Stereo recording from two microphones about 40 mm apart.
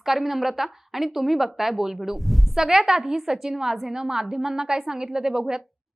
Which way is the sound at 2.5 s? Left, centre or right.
Centre.